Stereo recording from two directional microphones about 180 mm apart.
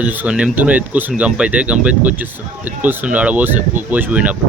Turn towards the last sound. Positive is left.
turn(degrees=-5)  # may be behind; listen again after turning